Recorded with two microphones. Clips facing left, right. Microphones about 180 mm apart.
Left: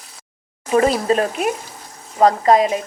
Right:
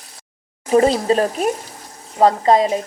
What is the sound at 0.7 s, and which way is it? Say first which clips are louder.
A woman's voice: right 2 dB; 30° right (ahead or behind).